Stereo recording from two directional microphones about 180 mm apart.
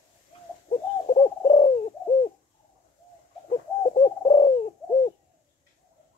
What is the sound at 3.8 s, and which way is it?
Bird, 35° left (ahead or behind).